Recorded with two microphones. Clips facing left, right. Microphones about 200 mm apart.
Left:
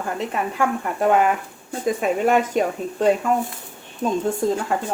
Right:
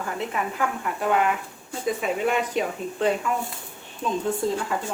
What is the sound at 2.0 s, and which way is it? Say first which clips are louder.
Speech: left 7 dB; 45° left (ahead or behind).